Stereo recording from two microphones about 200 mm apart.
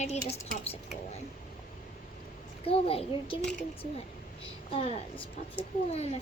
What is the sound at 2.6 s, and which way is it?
Speech, 30° left (ahead or behind).